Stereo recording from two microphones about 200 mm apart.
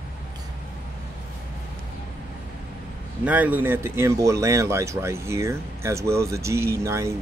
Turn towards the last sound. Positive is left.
turn(degrees=-15)  # may be behind; listen again after turning